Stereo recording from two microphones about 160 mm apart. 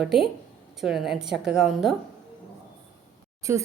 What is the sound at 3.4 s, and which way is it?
Speech, 20° right (ahead or behind).